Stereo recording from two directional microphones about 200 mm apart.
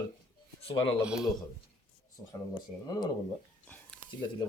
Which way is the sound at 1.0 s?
5° right (ahead or behind).